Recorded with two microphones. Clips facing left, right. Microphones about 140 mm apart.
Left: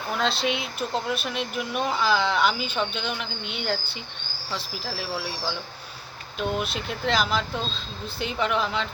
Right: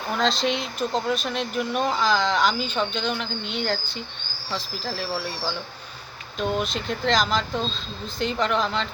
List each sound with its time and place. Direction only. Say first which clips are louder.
0.1 s speech: right 2 dB; 5° left (ahead or behind)